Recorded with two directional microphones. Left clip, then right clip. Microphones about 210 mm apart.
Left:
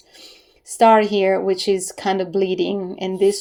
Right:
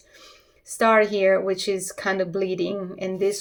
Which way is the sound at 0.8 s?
25° left (ahead or behind).